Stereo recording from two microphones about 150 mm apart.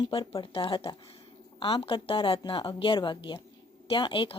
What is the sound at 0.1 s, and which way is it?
Speech, 35° left (ahead or behind).